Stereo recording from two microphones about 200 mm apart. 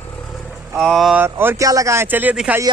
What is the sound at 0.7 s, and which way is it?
Speech, centre (ahead or behind).